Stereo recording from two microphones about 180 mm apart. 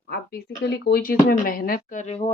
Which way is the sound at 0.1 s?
60° left (ahead or behind).